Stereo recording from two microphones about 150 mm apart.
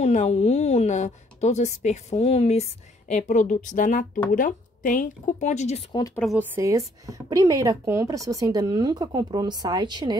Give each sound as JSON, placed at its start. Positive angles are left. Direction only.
{"t": 0.0, "sound": "a woman's voice", "side_deg": 50}
{"t": 5.9, "sound": "speech", "side_deg": 25}
{"t": 6.3, "sound": "speech", "side_deg": -15}